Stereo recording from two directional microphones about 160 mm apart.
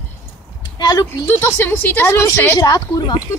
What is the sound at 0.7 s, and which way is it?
Speech, 25° left (ahead or behind).